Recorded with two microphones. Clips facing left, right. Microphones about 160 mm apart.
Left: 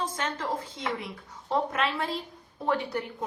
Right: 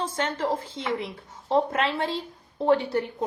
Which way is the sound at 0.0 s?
30° right (ahead or behind).